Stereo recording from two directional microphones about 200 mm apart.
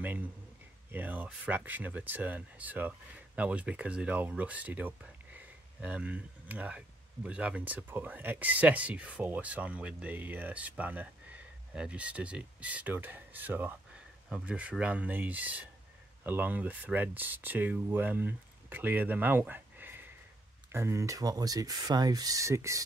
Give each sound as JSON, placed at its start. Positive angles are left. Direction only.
{"t": 0.9, "sound": "speech", "side_deg": -10}